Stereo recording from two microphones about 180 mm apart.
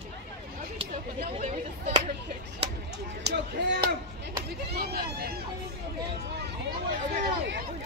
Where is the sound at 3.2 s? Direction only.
70° right (ahead or behind).